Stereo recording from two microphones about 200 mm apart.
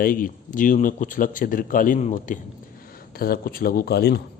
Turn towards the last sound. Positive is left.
turn(degrees=55)  # may be behind; listen again after turning